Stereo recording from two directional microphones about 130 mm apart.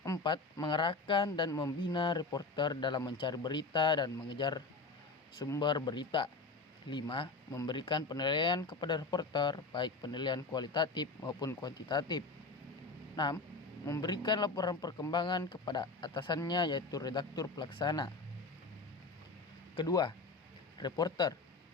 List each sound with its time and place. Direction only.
0.0 s speech: 30° left (ahead or behind)
1.5 s speech: 25° left (ahead or behind)
1.8 s speech: 35° left (ahead or behind)
19.7 s speech: 35° left (ahead or behind)